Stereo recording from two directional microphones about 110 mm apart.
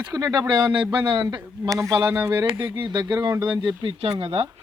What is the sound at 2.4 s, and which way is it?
Speech, 45° right (ahead or behind).